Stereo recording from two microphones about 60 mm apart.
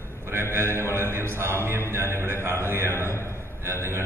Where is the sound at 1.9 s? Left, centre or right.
Right.